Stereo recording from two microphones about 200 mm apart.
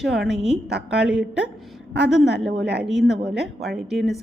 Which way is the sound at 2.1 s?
60° right (ahead or behind).